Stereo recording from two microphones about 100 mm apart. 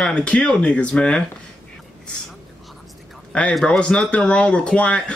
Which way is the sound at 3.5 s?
5° left (ahead or behind).